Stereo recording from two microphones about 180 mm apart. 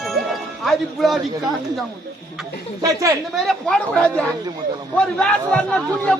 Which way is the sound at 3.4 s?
5° left (ahead or behind).